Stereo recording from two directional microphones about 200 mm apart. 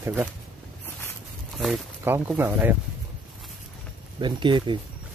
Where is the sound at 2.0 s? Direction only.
10° right (ahead or behind).